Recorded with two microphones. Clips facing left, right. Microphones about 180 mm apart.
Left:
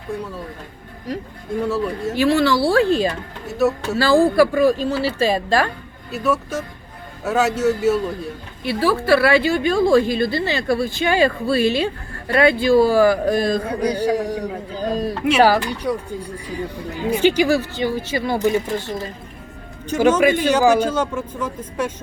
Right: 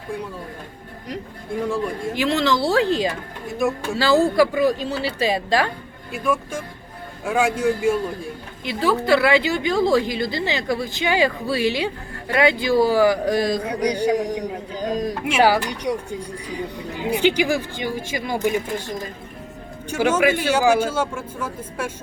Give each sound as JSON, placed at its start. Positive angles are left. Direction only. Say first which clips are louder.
{"t": 1.7, "sound": "speech", "louder": "left 2 dB", "side_deg": -15}